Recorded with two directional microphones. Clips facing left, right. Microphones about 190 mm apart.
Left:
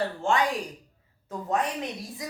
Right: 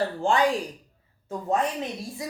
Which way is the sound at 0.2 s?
30° right (ahead or behind).